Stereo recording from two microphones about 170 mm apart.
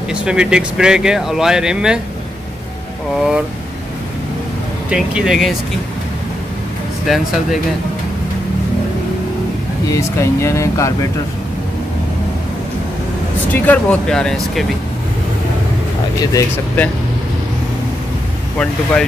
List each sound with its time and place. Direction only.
0.1 s speech: 5° right (ahead or behind)
3.2 s speech: 5° right (ahead or behind)
4.8 s speech: 5° right (ahead or behind)
7.1 s speech: centre (ahead or behind)
9.8 s speech: 15° left (ahead or behind)
13.5 s speech: 10° left (ahead or behind)
16.3 s speech: 10° left (ahead or behind)
18.6 s speech: 5° left (ahead or behind)